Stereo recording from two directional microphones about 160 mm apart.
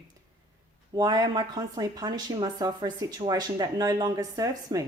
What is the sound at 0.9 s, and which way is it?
Speech, 25° right (ahead or behind).